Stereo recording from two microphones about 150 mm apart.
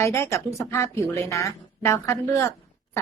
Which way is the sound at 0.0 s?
20° left (ahead or behind).